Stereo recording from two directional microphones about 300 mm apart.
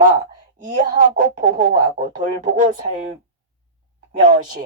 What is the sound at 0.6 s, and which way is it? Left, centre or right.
Speech, right.